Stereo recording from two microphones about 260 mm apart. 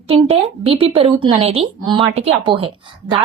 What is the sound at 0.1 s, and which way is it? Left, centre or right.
Speech, right.